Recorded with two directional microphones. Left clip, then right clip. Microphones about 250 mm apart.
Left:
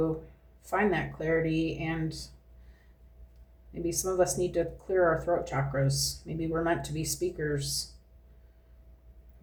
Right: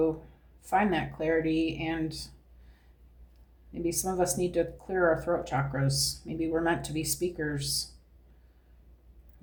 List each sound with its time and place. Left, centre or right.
0.6 s speech: right
3.8 s speech: right